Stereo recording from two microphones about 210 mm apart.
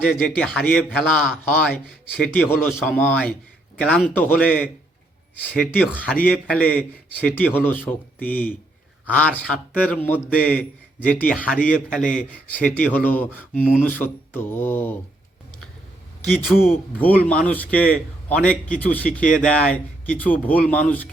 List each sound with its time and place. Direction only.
0.0 s a man's voice: centre (ahead or behind)
11.5 s a man's voice: 40° left (ahead or behind)
12.1 s speech: 5° left (ahead or behind)
16.2 s speech: 5° left (ahead or behind)
19.2 s a man's voice: 40° left (ahead or behind)
19.5 s speech: 5° left (ahead or behind)